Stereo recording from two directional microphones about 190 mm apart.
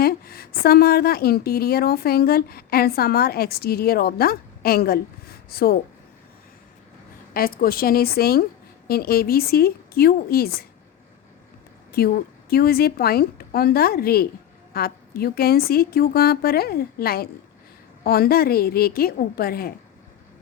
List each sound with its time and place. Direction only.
0.0 s a woman's voice: 55° left (ahead or behind)
7.3 s a woman's voice: 50° left (ahead or behind)
11.9 s a woman's voice: 55° left (ahead or behind)